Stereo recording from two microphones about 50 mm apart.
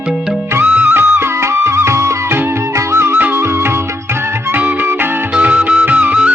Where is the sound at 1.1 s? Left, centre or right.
Right.